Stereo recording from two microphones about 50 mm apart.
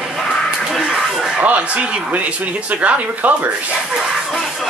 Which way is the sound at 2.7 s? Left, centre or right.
Right.